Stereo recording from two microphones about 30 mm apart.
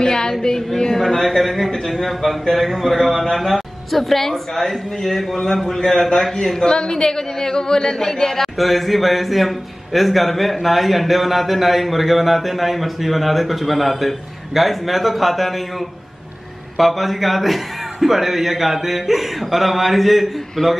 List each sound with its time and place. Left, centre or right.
0.0 s a woman's voice: left
6.6 s speech: left
8.4 s speech: centre
16.7 s speech: centre
20.6 s a man's voice: centre